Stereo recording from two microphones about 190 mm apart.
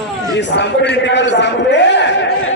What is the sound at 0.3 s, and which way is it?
A man's voice, 65° left (ahead or behind).